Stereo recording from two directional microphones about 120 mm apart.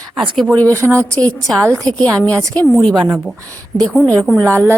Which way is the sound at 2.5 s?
15° left (ahead or behind).